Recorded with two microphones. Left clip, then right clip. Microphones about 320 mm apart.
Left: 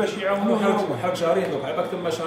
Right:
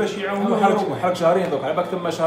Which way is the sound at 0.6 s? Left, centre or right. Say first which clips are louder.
Right 4 dB; centre.